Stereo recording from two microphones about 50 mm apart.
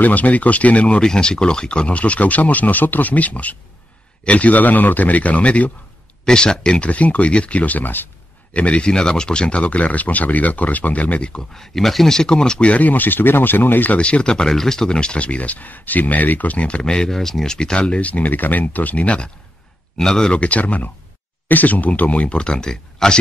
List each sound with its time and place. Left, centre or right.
0.0 s speech: left
1.0 s a man's voice: centre
6.2 s speech: centre; by 8.1 s left
8.5 s speech: left
11.5 s speech: centre; by 13.9 s left
13.9 s speech: left